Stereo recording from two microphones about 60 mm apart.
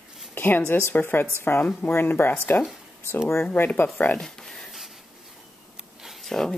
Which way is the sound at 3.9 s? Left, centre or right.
Left.